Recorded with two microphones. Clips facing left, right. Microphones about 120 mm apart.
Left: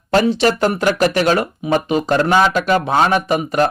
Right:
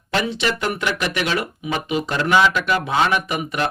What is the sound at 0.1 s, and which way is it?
Speech, 40° left (ahead or behind).